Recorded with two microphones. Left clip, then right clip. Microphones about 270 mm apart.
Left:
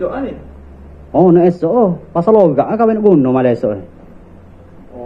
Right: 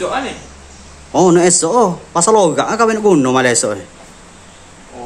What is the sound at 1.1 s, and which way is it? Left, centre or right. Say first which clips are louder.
Speech: left 1 dB; centre.